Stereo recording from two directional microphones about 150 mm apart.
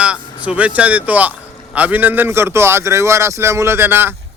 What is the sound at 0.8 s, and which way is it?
A man's voice, 10° right (ahead or behind).